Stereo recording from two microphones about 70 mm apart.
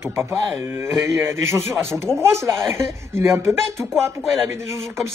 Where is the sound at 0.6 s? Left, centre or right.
Right.